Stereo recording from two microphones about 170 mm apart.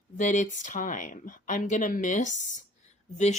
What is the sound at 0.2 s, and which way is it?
Speech, 50° left (ahead or behind).